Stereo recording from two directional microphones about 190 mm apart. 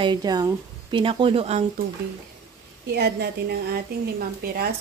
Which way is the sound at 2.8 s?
55° right (ahead or behind).